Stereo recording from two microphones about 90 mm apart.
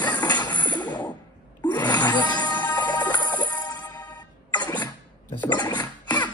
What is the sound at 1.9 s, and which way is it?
Music, 50° left (ahead or behind).